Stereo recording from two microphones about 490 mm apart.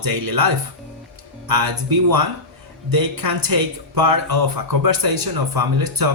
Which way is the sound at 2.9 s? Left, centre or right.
Right.